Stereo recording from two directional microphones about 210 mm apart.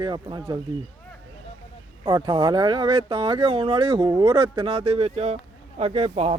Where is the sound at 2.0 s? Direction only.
20° right (ahead or behind).